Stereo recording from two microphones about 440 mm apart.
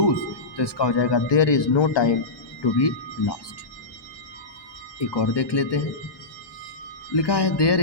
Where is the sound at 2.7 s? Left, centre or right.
Left.